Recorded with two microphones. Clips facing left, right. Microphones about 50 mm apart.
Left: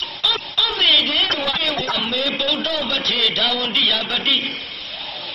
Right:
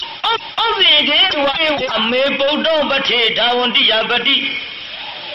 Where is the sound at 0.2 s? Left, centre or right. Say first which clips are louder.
Right 5 dB; right.